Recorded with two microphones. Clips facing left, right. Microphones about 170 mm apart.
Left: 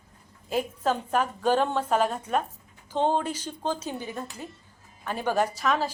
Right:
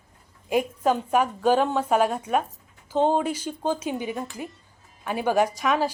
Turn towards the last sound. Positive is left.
turn(degrees=-5)  # may be behind; listen again after turning